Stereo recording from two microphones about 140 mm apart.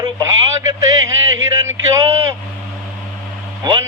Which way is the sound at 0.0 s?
25° right (ahead or behind).